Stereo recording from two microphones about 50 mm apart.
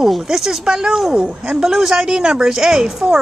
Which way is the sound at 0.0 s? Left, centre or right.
Centre.